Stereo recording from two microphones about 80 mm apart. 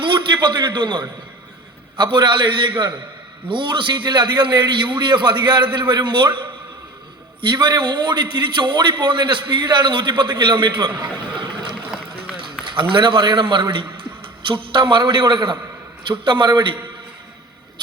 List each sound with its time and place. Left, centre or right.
0.0 s a man's voice: right
12.7 s a man's voice: right